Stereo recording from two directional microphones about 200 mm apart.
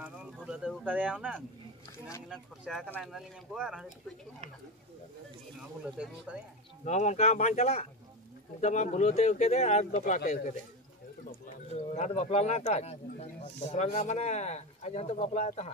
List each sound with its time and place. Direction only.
0.5 s speech: 5° right (ahead or behind)
5.9 s speech: 5° right (ahead or behind)
6.8 s speech: 35° left (ahead or behind)